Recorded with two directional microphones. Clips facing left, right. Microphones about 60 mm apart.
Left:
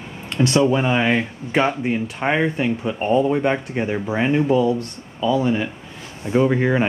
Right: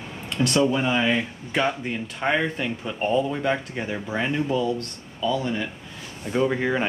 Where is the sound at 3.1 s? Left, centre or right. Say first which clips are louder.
Left 5 dB; left.